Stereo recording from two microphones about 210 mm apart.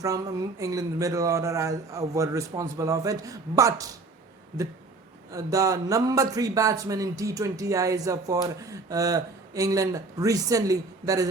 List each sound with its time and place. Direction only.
0.0 s speech: 15° right (ahead or behind)
5.3 s speech: 15° right (ahead or behind)